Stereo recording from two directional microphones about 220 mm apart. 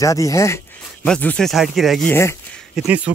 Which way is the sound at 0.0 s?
15° left (ahead or behind).